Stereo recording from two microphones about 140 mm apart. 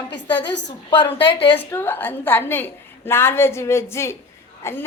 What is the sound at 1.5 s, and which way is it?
A woman's voice, 15° left (ahead or behind).